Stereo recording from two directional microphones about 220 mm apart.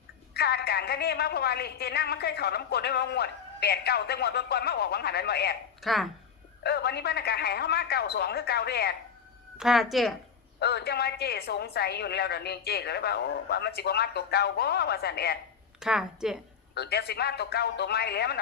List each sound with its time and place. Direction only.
0.3 s a woman's voice: 45° left (ahead or behind)
5.8 s a woman's voice: centre (ahead or behind)
6.6 s a woman's voice: 50° left (ahead or behind)
9.6 s a woman's voice: centre (ahead or behind)
10.6 s a woman's voice: 50° left (ahead or behind)
15.8 s a woman's voice: 5° right (ahead or behind)
16.7 s a woman's voice: 45° left (ahead or behind)